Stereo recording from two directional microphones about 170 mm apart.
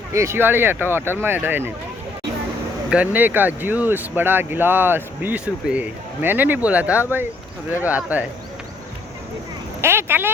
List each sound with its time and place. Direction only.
0.1 s speech: 15° right (ahead or behind)
2.9 s speech: 10° right (ahead or behind)
9.8 s speech: 15° right (ahead or behind)